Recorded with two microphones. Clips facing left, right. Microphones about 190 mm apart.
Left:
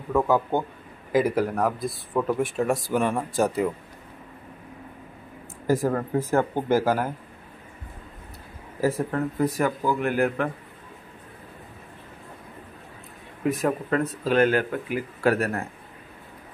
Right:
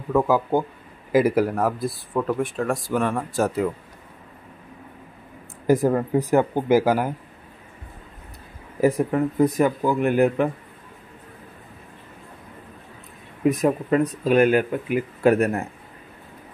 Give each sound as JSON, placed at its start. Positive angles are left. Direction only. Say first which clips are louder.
{"t": 0.1, "sound": "speech", "louder": "right 2 dB", "side_deg": -5}
{"t": 5.7, "sound": "speech", "louder": "right 4 dB", "side_deg": -20}
{"t": 8.8, "sound": "speech", "louder": "right 5 dB", "side_deg": -15}
{"t": 13.5, "sound": "speech", "louder": "right 4 dB", "side_deg": -15}